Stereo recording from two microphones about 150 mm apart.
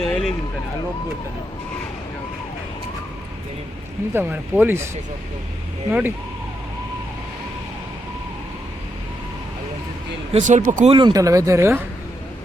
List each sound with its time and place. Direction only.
0.0 s a sound: centre (ahead or behind)
4.1 s speech: 15° right (ahead or behind)
5.9 s speech: 15° right (ahead or behind)
10.3 s speech: 55° right (ahead or behind)
10.8 s speech: 30° right (ahead or behind)